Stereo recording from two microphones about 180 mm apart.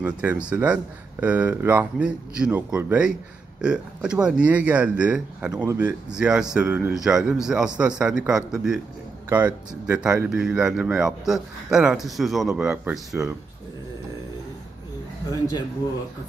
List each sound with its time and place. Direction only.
0.0 s speech: 5° right (ahead or behind)